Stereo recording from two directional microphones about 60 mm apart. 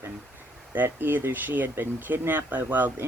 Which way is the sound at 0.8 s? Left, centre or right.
Right.